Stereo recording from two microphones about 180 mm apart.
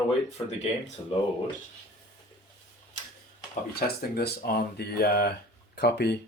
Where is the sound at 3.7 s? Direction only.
60° left (ahead or behind).